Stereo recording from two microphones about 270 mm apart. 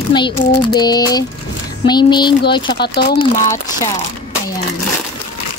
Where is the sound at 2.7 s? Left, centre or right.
Left.